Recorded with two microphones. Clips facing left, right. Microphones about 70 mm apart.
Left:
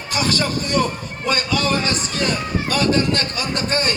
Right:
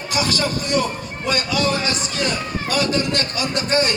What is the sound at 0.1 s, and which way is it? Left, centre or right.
Music, left.